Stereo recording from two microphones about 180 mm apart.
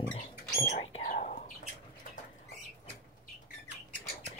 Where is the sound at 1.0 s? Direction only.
45° left (ahead or behind).